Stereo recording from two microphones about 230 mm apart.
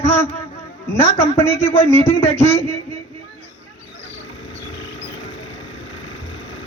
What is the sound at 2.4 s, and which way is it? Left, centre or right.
Speech, centre.